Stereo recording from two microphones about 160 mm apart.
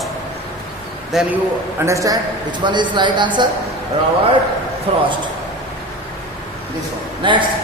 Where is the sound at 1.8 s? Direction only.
20° right (ahead or behind).